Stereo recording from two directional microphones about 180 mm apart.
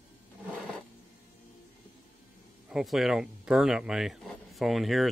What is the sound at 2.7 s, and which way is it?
Speech, centre (ahead or behind).